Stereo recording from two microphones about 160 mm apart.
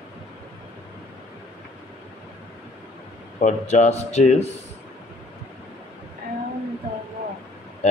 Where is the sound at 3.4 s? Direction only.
45° left (ahead or behind).